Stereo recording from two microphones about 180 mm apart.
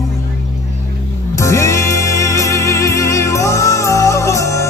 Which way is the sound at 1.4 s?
15° left (ahead or behind).